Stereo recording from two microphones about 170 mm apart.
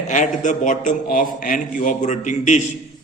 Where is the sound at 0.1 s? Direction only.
45° left (ahead or behind).